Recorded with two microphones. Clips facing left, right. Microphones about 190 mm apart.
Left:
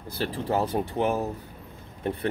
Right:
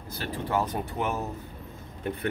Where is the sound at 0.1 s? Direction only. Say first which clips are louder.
Left 2 dB; 30° left (ahead or behind).